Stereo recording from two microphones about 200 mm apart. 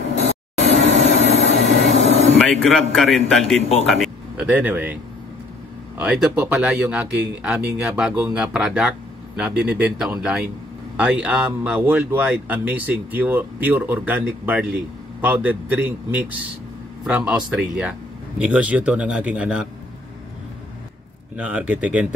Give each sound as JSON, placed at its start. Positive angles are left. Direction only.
{"t": 0.7, "sound": "vehicle", "side_deg": -35}
{"t": 2.3, "sound": "speech", "side_deg": 0}
{"t": 5.9, "sound": "speech", "side_deg": -5}
{"t": 21.4, "sound": "speech", "side_deg": -5}